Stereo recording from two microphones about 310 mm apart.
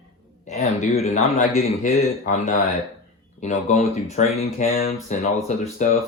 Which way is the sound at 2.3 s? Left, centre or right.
Left.